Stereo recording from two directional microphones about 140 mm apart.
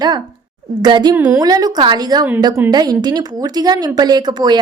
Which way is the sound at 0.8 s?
30° right (ahead or behind).